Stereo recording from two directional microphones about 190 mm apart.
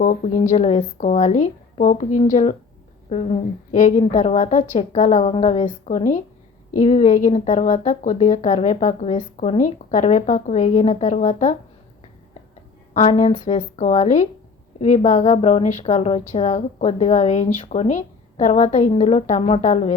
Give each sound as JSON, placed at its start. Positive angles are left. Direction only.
{"t": 0.0, "sound": "a woman's voice", "side_deg": 45}
{"t": 12.9, "sound": "a woman's voice", "side_deg": 40}